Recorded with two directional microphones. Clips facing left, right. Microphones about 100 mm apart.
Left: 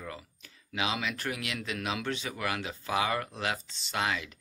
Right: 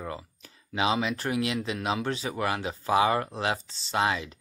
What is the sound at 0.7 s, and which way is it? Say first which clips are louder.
Speech: right 6 dB; 30° right (ahead or behind).